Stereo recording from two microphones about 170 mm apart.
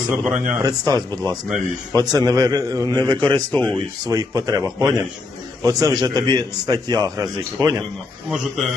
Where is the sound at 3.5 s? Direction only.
10° left (ahead or behind).